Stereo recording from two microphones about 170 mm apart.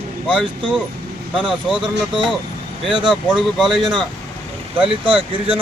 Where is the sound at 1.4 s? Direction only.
5° right (ahead or behind).